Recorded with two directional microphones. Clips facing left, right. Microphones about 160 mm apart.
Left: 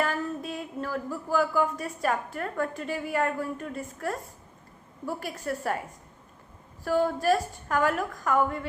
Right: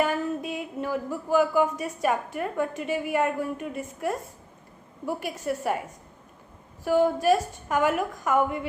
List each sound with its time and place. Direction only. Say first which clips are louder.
0.0 s a sound: right 3 dB; 10° right (ahead or behind)
2.0 s a woman's voice: right 2 dB; 10° right (ahead or behind)
6.8 s a woman's voice: right 3 dB; 15° right (ahead or behind)